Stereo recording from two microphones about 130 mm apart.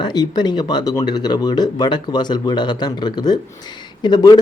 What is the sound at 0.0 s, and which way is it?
Speech, 35° left (ahead or behind).